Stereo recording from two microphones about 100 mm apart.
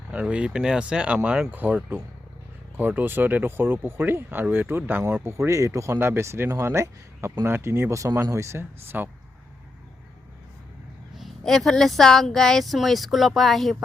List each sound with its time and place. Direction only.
0.1 s speech: 10° right (ahead or behind)
11.1 s speech: centre (ahead or behind)